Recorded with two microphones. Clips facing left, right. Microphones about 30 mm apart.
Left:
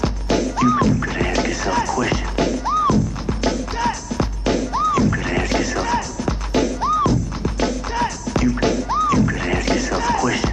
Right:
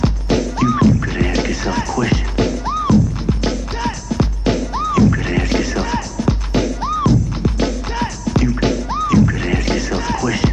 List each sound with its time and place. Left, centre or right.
0.0 s music: centre
1.3 s music: centre
9.2 s music: centre